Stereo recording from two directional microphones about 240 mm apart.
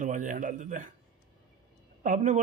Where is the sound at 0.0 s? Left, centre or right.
Right.